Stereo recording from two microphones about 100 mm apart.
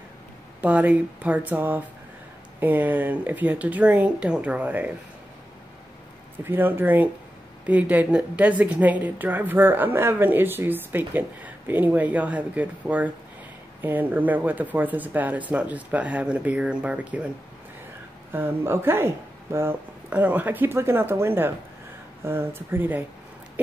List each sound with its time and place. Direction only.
0.6 s a woman's voice: 15° right (ahead or behind)
6.4 s a woman's voice: 20° right (ahead or behind)
18.3 s speech: 25° right (ahead or behind)